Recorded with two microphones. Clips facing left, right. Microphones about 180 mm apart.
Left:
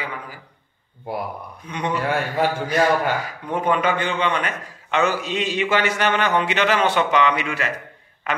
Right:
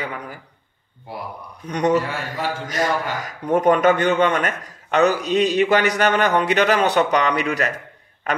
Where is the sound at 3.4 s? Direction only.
45° right (ahead or behind).